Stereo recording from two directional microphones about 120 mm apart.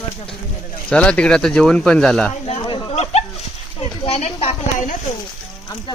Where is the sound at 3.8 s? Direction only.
55° left (ahead or behind).